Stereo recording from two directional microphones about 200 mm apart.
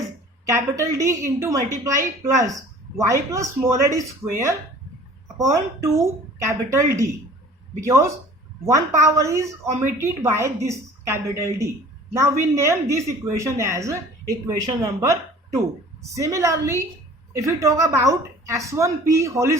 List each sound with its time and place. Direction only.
0.4 s a woman's voice: 15° right (ahead or behind)